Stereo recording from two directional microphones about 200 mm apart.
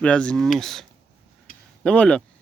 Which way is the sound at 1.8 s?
5° left (ahead or behind).